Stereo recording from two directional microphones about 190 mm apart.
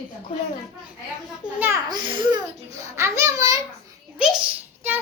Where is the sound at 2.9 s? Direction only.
15° right (ahead or behind).